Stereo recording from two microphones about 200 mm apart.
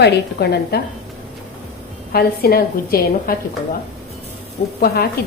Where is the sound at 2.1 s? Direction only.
50° left (ahead or behind).